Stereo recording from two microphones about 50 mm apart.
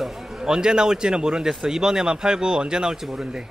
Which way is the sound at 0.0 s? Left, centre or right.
Centre.